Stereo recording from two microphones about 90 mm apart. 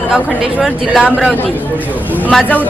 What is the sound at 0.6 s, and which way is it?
Speech, 10° right (ahead or behind).